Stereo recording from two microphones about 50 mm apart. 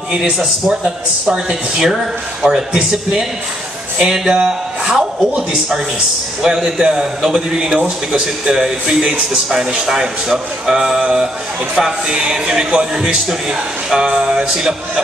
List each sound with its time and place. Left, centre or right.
0.1 s a man's voice: centre
6.4 s a man's voice: centre